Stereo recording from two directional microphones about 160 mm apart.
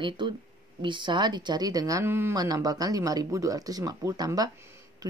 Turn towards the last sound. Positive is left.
turn(degrees=-15)  # may be behind; listen again after turning